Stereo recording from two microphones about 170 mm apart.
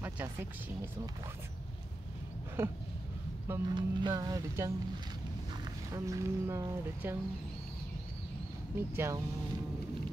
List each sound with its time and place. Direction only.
0.0 s speech: 10° right (ahead or behind)
2.6 s speech: 15° right (ahead or behind)
3.7 s speech: 25° right (ahead or behind)
5.9 s speech: 20° right (ahead or behind)
8.7 s speech: 15° right (ahead or behind)